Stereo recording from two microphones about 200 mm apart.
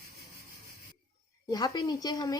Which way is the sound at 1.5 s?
20° left (ahead or behind).